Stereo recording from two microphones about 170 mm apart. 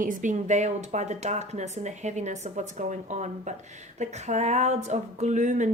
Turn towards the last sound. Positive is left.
turn(degrees=-45)  # may be behind; listen again after turning